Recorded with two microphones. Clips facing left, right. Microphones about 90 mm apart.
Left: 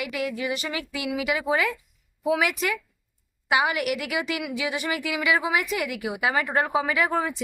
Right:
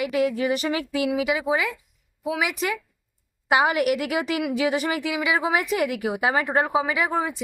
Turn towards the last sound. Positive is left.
turn(degrees=-15)  # may be behind; listen again after turning